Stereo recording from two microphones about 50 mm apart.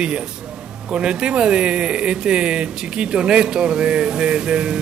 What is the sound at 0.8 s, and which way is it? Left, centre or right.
Speech, centre.